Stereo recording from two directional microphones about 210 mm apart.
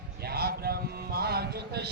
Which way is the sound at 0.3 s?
50° right (ahead or behind).